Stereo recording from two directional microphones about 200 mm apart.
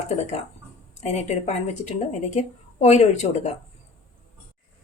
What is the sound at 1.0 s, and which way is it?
Speech, 35° left (ahead or behind).